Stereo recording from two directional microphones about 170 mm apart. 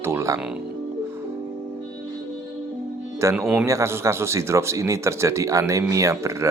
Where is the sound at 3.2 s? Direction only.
15° right (ahead or behind).